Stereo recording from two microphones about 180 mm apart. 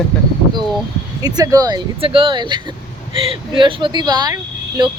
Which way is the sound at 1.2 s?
20° right (ahead or behind).